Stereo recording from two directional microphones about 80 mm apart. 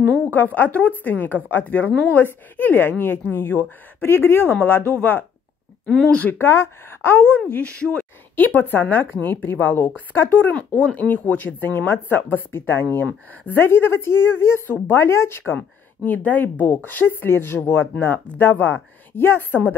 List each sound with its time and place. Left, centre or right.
0.3 s a woman's voice: left
5.9 s speech: centre
6.3 s a woman's voice: left
16.0 s a woman's voice: centre